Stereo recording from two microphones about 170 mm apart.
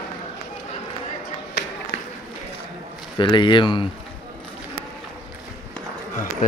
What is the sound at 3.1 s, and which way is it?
Speech, 25° left (ahead or behind).